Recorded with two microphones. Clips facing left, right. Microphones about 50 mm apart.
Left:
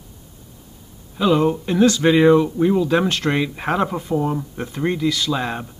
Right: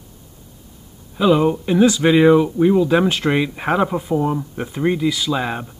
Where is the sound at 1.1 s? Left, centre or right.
Centre.